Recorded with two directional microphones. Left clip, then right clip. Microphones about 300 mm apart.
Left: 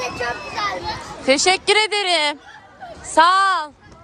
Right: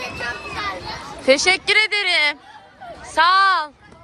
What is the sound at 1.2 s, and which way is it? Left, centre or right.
A woman's voice, centre.